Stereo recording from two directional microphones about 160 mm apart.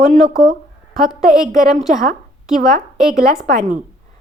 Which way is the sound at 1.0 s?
5° right (ahead or behind).